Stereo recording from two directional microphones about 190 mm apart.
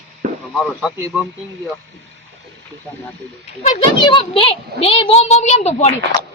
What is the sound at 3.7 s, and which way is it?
A child's voice, 25° left (ahead or behind).